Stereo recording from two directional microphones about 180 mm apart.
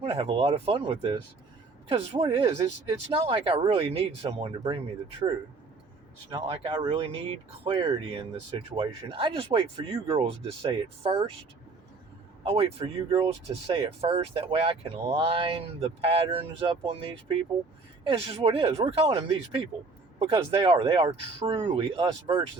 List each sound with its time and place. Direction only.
0.0 s speech: 30° right (ahead or behind)
6.3 s speech: 25° right (ahead or behind)
12.8 s speech: 25° right (ahead or behind)